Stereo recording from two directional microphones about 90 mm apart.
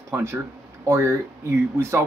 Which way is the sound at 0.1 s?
30° right (ahead or behind).